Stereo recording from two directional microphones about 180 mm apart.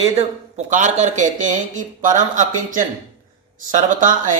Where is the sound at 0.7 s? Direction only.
45° right (ahead or behind).